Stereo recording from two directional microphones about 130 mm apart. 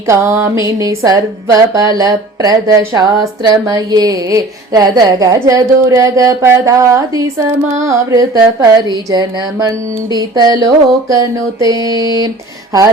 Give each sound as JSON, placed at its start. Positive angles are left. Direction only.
{"t": 0.1, "sound": "a woman's voice", "side_deg": -20}